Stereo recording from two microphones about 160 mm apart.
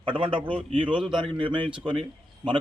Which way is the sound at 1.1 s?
30° right (ahead or behind).